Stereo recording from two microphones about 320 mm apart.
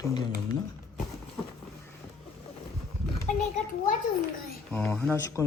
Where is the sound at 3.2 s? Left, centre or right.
Left.